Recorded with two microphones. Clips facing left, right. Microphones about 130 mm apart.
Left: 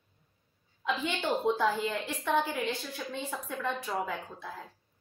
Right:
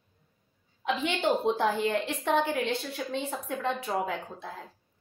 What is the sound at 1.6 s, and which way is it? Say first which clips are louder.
Speech: right 3 dB; 60° right (ahead or behind).